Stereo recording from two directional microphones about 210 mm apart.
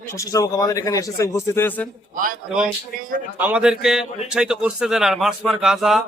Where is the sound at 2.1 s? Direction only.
40° right (ahead or behind).